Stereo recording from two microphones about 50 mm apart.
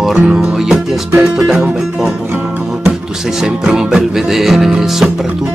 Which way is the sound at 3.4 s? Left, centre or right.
Centre.